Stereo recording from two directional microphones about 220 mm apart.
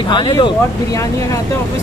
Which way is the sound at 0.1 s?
20° left (ahead or behind).